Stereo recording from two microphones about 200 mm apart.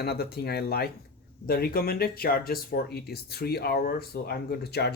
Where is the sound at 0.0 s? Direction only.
50° left (ahead or behind).